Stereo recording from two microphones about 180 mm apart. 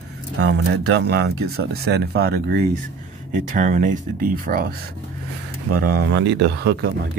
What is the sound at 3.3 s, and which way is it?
Speech, 45° right (ahead or behind).